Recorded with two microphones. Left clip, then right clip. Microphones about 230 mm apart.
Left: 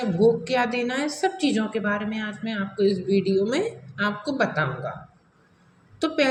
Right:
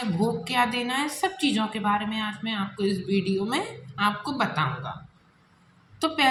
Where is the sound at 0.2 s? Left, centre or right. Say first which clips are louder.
Left 4 dB; right.